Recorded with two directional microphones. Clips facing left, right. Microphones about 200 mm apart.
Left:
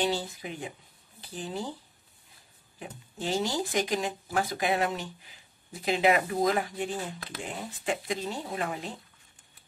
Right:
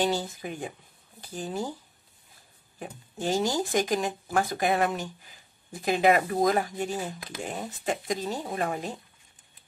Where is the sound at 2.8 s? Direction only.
45° right (ahead or behind).